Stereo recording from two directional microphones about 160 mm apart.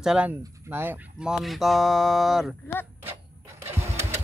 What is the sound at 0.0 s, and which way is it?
Speech, 5° right (ahead or behind).